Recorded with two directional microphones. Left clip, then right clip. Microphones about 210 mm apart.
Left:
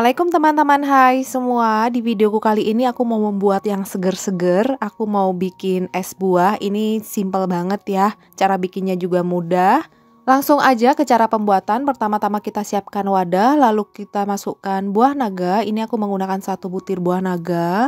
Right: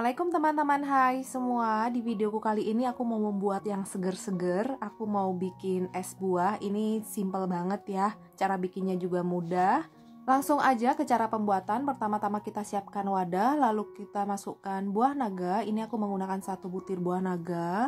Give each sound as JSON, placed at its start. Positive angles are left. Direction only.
{"t": 0.0, "sound": "speech", "side_deg": 40}